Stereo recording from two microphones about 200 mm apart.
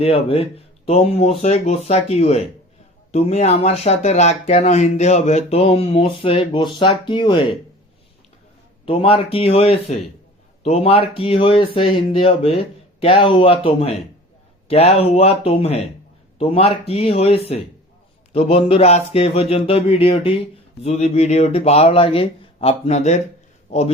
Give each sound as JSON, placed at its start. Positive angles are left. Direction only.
{"t": 0.0, "sound": "speech", "side_deg": 30}
{"t": 8.9, "sound": "a man's voice", "side_deg": 25}